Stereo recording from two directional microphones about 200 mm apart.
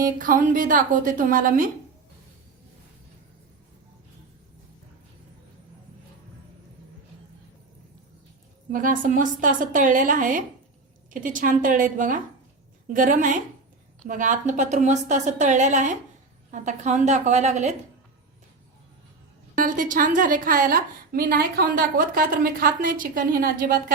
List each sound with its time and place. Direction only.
0.0 s a woman's voice: 40° right (ahead or behind)
8.7 s a woman's voice: 40° right (ahead or behind)
19.5 s a woman's voice: 40° right (ahead or behind)